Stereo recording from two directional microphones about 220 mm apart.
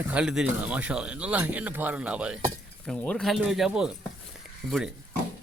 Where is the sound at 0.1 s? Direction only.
5° right (ahead or behind).